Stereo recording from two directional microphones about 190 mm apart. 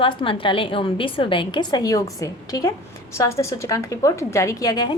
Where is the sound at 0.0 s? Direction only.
25° left (ahead or behind).